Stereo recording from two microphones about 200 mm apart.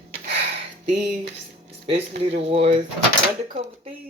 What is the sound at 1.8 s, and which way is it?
Speech, 35° right (ahead or behind).